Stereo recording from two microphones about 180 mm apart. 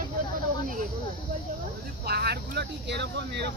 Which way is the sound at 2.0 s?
65° right (ahead or behind).